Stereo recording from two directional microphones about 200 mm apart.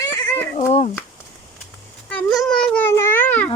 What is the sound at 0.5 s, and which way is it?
Speech, 30° left (ahead or behind).